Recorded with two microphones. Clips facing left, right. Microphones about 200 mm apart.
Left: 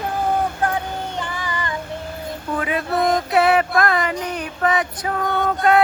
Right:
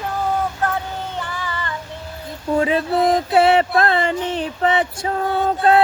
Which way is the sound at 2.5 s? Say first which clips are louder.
Right 4 dB; 30° right (ahead or behind).